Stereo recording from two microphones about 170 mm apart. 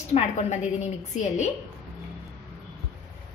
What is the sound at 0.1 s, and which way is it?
A woman's voice, 40° left (ahead or behind).